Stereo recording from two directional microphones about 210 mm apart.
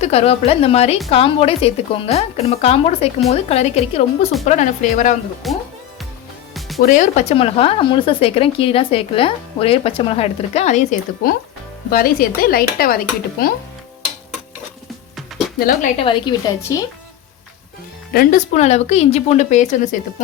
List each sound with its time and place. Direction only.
0.0 s speech: 30° left (ahead or behind)
5.4 s music: centre (ahead or behind)
6.8 s speech: 35° left (ahead or behind)
15.5 s speech: 45° left (ahead or behind)
16.0 s a woman's voice: 25° left (ahead or behind)
18.1 s speech: 40° left (ahead or behind)